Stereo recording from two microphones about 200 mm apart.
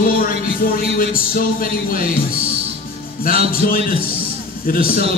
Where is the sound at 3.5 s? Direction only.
45° left (ahead or behind).